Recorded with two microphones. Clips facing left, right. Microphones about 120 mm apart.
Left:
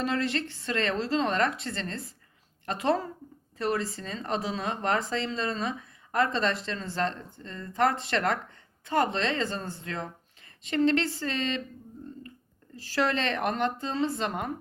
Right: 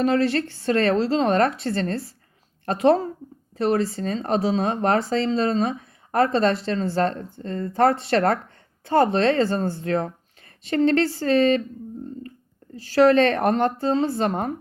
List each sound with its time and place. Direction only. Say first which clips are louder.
0.0 s speech: right 8 dB; 35° right (ahead or behind)
13.0 s speech: right 11 dB; 40° right (ahead or behind)